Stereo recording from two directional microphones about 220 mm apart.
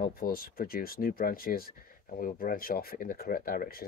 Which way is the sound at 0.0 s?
40° left (ahead or behind).